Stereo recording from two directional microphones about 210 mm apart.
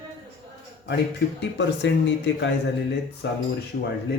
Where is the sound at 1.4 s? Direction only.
60° left (ahead or behind).